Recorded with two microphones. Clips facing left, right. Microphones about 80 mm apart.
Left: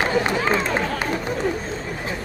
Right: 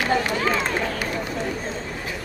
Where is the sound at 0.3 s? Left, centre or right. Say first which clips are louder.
Left 2 dB; left.